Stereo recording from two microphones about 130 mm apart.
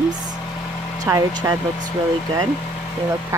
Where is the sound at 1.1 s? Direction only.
25° right (ahead or behind).